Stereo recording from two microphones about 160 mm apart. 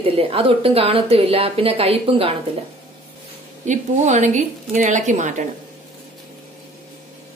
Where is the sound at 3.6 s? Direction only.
50° right (ahead or behind).